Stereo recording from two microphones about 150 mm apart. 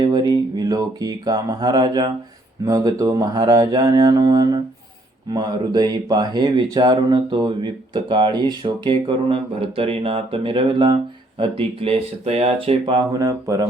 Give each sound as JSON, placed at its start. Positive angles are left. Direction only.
{"t": 0.0, "sound": "a sound", "side_deg": -25}
{"t": 2.6, "sound": "speech", "side_deg": -25}
{"t": 12.8, "sound": "speech", "side_deg": -30}